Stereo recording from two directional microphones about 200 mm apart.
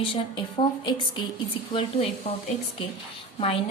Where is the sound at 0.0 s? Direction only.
25° left (ahead or behind).